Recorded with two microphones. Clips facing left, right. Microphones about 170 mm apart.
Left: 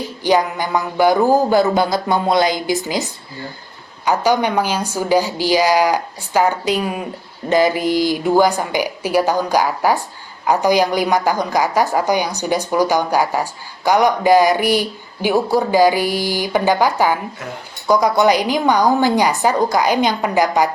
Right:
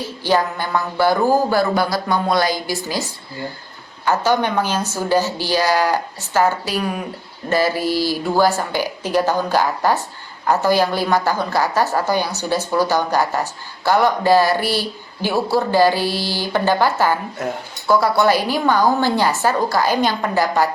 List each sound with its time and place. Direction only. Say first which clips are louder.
0.0 s a woman's voice: left 2 dB; 15° left (ahead or behind)